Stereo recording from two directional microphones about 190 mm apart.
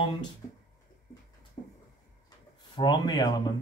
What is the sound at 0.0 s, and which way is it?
Speech, 25° left (ahead or behind).